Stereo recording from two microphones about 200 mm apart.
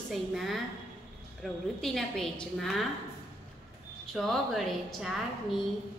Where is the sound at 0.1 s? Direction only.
Centre (ahead or behind).